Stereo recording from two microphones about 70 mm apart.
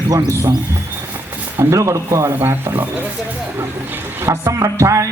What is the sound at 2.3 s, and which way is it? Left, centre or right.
Speech, right.